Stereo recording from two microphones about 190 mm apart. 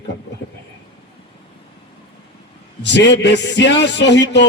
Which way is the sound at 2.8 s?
65° left (ahead or behind).